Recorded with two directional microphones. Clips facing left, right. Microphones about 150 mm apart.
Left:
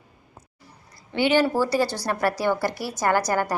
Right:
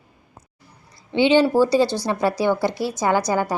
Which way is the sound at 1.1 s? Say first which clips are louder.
Right 5 dB; 20° right (ahead or behind).